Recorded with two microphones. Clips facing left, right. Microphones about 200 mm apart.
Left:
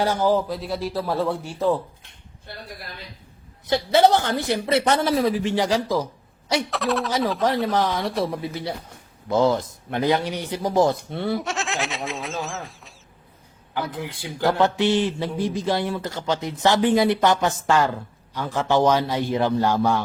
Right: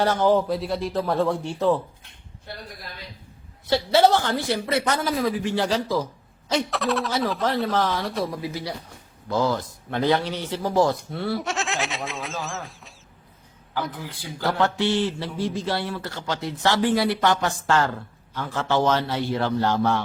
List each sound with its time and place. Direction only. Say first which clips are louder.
0.0 s speech: right 1 dB; 10° left (ahead or behind)
3.7 s a woman's voice: left 1 dB; 20° left (ahead or behind)
6.7 s speech: left 1 dB; centre (ahead or behind)
7.4 s a man's voice: left 2 dB; 15° left (ahead or behind)
9.3 s a man's voice: left 4 dB; 20° left (ahead or behind)
11.3 s a sound: even; centre (ahead or behind)
13.7 s a man's voice: left 2 dB; 20° left (ahead or behind)